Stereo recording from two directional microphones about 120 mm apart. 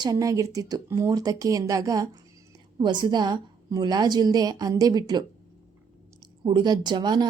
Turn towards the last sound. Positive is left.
turn(degrees=-35)  # may be behind; listen again after turning